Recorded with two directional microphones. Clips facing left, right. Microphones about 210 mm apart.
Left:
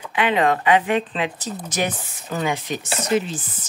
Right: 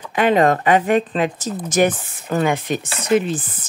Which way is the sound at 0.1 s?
45° right (ahead or behind).